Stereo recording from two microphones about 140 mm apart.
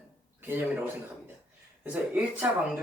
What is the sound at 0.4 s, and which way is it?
Speech, 15° right (ahead or behind).